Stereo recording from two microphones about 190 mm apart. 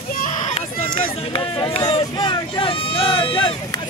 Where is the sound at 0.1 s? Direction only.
45° left (ahead or behind); by 3.5 s 25° left (ahead or behind).